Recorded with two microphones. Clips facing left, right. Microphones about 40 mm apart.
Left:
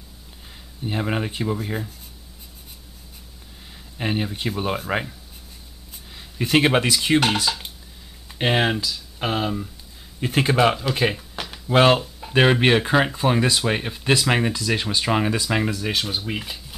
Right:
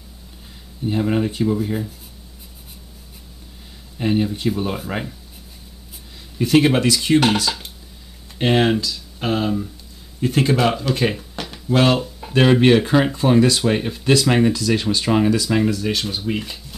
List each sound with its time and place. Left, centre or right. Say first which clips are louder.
0.8 s speech: right 5 dB; centre
4.0 s speech: right 5 dB; centre
6.3 s speech: right 3 dB; left
10.2 s speech: right 1 dB; centre
11.1 s a sound: right 2 dB; centre
11.7 s speech: left 1 dB; left; by 16.5 s centre